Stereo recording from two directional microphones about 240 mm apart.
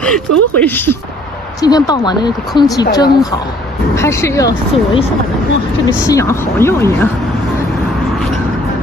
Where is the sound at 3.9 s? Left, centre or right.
Centre.